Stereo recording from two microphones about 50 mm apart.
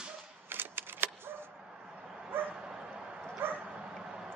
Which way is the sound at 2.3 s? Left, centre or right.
Right.